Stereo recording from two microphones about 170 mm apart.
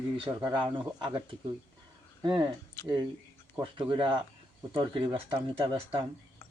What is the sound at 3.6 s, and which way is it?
Speech, 30° right (ahead or behind).